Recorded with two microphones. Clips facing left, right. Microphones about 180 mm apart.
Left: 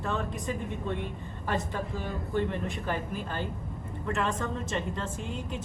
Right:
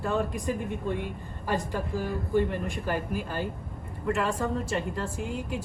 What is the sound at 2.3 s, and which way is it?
Speech, 5° right (ahead or behind).